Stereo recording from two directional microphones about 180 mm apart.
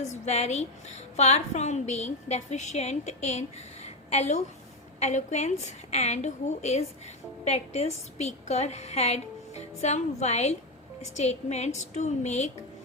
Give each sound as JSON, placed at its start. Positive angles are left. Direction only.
{"t": 0.0, "sound": "a woman's voice", "side_deg": 35}
{"t": 3.8, "sound": "a sound", "side_deg": 35}
{"t": 4.9, "sound": "a woman's voice", "side_deg": 40}